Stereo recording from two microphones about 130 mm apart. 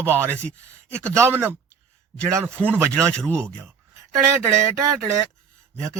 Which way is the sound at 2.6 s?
15° right (ahead or behind).